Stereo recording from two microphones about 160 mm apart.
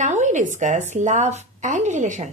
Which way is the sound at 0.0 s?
50° right (ahead or behind).